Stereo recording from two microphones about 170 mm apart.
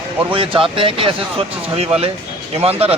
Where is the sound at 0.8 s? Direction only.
30° right (ahead or behind).